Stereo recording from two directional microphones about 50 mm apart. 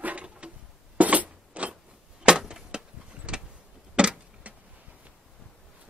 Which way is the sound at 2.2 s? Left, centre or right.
Centre.